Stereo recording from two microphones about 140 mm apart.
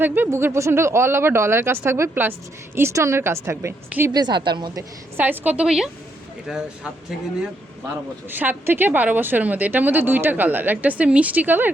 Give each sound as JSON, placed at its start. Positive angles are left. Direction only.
{"t": 0.0, "sound": "a woman's voice", "side_deg": -15}
{"t": 4.1, "sound": "a woman's voice", "side_deg": -30}
{"t": 4.8, "sound": "a woman's voice", "side_deg": -15}
{"t": 8.3, "sound": "a woman's voice", "side_deg": -15}